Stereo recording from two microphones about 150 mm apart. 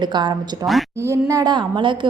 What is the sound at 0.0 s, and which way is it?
Speech, 30° right (ahead or behind).